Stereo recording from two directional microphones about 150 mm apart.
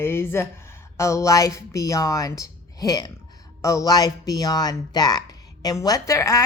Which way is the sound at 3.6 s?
20° left (ahead or behind).